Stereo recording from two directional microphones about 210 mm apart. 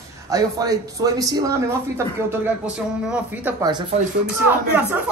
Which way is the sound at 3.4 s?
15° right (ahead or behind).